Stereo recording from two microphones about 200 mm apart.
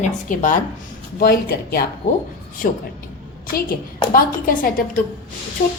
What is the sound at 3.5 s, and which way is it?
A woman's voice, 45° left (ahead or behind).